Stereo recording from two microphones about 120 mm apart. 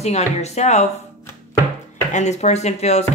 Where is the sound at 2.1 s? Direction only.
70° left (ahead or behind).